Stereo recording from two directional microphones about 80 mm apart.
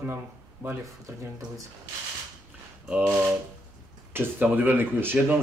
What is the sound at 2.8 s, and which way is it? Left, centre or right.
Speech, centre.